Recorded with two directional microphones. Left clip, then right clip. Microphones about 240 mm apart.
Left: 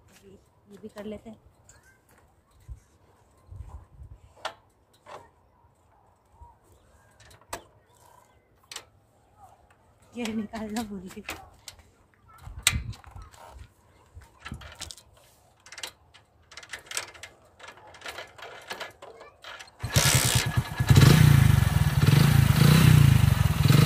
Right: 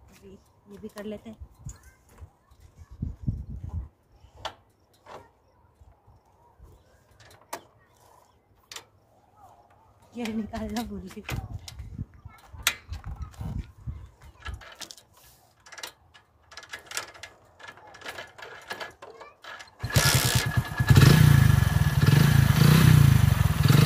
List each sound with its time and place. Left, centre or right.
0.9 s speech: right
7.5 s vehicle: centre
10.1 s speech: centre
14.8 s a sound: left
16.5 s a sound: centre
18.0 s coin: centre
19.8 s vehicle: centre
20.2 s motorcycle: centre
21.2 s vehicle: centre